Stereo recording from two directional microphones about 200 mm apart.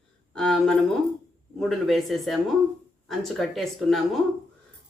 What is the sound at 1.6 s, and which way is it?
Speech, centre (ahead or behind).